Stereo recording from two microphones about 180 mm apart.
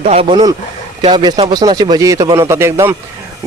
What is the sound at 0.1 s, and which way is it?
A man's voice, 30° right (ahead or behind).